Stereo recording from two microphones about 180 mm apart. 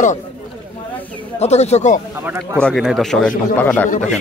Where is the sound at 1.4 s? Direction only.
35° left (ahead or behind).